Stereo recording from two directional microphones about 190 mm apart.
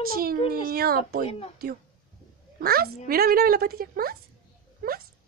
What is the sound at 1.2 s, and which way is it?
Speech, 30° left (ahead or behind).